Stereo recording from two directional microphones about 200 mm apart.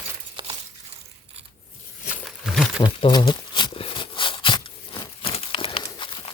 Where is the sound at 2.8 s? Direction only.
20° left (ahead or behind).